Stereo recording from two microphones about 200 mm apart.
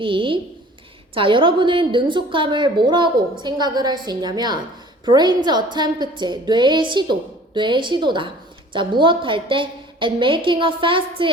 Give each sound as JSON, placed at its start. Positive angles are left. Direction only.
{"t": 0.0, "sound": "a woman's voice", "side_deg": -25}